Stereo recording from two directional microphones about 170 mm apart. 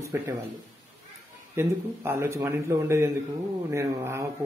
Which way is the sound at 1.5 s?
15° right (ahead or behind).